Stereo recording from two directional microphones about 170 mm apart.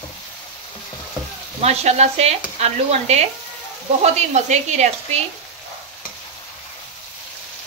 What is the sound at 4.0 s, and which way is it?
Speech, 45° right (ahead or behind).